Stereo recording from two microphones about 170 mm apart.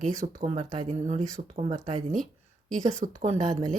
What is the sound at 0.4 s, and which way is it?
Speech, 35° right (ahead or behind).